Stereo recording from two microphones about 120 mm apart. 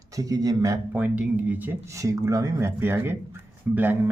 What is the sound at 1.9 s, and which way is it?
Speech, 25° right (ahead or behind).